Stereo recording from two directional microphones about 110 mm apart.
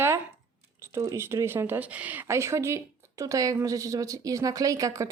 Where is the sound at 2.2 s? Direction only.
25° right (ahead or behind).